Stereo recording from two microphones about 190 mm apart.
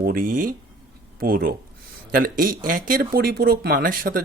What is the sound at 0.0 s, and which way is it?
Speech, 50° right (ahead or behind).